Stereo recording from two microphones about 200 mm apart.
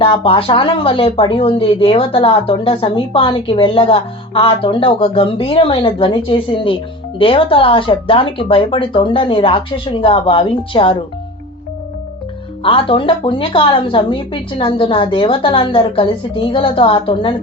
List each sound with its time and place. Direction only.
0.0 s a woman's voice: 25° left (ahead or behind)
12.6 s a woman's voice: 25° left (ahead or behind)